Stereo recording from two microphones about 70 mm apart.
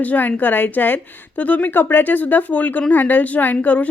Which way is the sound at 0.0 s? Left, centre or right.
Left.